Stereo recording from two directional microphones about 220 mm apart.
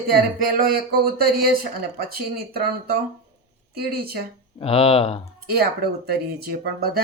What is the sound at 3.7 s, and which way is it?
Speech, 45° right (ahead or behind).